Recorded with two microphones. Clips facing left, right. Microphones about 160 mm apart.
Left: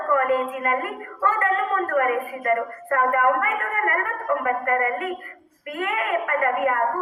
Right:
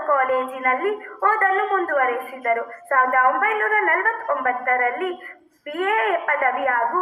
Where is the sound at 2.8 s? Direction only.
50° right (ahead or behind).